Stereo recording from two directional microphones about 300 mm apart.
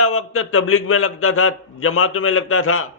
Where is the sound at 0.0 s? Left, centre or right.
Left.